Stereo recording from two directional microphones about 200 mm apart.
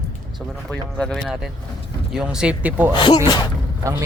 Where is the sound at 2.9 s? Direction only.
20° left (ahead or behind).